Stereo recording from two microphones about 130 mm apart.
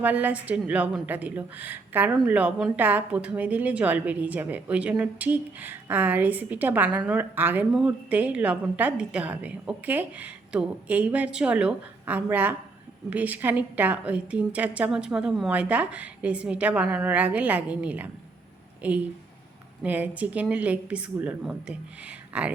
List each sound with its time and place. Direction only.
0.0 s speech: 10° right (ahead or behind)